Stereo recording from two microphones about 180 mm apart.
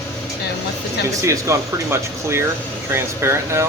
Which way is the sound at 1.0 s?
15° right (ahead or behind).